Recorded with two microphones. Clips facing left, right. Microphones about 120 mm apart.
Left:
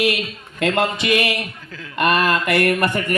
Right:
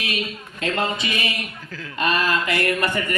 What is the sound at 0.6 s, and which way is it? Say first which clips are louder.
Speech: left 5 dB; 70° left (ahead or behind).